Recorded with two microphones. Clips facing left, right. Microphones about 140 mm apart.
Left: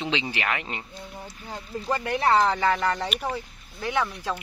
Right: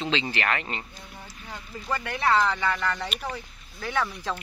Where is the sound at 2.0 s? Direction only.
25° left (ahead or behind).